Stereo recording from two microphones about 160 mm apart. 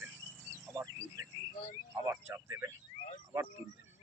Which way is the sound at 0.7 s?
20° right (ahead or behind).